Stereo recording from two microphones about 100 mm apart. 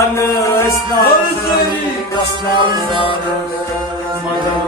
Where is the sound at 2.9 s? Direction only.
55° right (ahead or behind).